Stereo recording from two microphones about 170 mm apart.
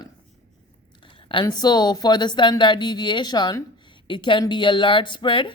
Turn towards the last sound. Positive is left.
turn(degrees=30)  # may be behind; listen again after turning